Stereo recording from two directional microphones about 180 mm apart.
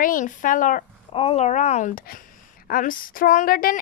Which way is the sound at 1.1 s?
35° left (ahead or behind).